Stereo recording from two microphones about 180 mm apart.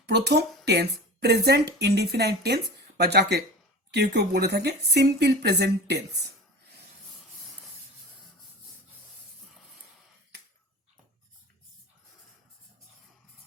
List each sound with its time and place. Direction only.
0.0 s speech: 70° right (ahead or behind)